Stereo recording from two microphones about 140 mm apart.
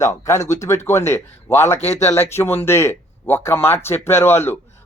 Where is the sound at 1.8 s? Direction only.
55° left (ahead or behind).